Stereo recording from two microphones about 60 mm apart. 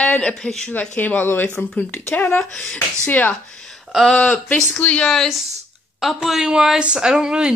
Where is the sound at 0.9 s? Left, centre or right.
Left.